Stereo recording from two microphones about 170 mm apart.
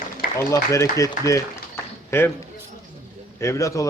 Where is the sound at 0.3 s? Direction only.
15° left (ahead or behind).